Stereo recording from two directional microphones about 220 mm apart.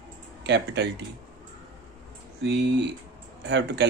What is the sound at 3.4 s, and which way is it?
Speech, 50° right (ahead or behind).